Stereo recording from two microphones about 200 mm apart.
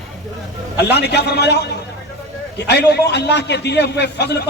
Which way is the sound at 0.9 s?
55° left (ahead or behind).